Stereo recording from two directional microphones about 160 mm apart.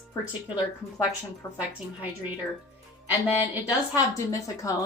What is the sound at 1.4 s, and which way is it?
Speech, 15° left (ahead or behind).